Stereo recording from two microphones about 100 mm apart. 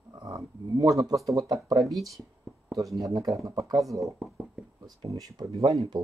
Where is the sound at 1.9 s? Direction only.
Centre (ahead or behind).